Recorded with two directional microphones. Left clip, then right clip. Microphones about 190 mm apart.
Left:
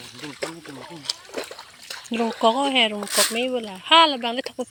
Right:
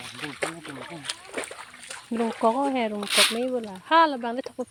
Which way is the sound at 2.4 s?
Centre (ahead or behind).